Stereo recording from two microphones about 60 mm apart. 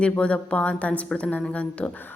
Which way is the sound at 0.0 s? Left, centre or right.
Left.